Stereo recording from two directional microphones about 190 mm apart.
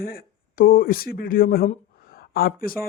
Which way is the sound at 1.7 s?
50° left (ahead or behind).